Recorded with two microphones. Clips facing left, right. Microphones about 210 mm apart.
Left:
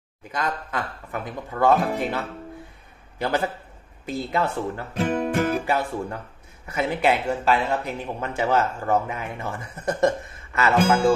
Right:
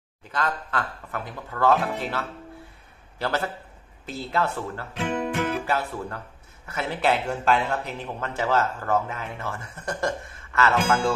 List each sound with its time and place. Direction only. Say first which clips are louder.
0.3 s a man's voice: even; 15° left (ahead or behind)
4.9 s speech: left 4 dB; 40° left (ahead or behind)
5.7 s speech: left 3 dB; 15° left (ahead or behind)